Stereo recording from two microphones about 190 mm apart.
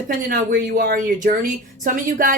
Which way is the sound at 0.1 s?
50° right (ahead or behind).